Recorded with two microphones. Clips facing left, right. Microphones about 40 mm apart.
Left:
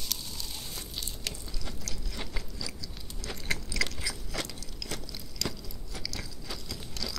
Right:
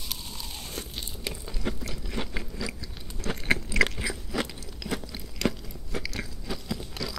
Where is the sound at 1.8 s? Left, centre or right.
Right.